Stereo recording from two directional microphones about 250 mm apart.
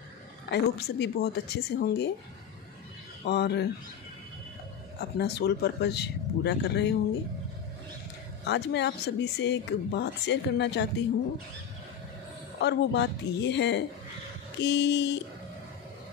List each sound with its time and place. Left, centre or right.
0.5 s speech: left
3.3 s speech: left
5.1 s speech: left
8.5 s speech: left
12.5 s speech: left